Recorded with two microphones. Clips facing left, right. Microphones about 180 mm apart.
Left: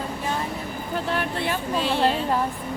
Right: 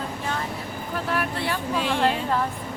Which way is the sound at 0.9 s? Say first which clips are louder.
Left 1 dB; 25° left (ahead or behind).